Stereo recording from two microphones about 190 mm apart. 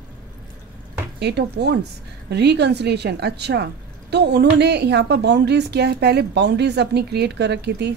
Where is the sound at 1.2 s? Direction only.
60° right (ahead or behind).